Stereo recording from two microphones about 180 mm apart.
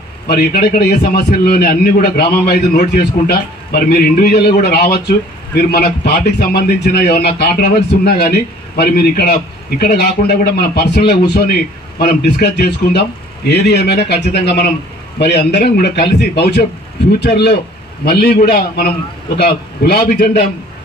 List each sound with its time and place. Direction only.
0.3 s a man's voice: 60° left (ahead or behind)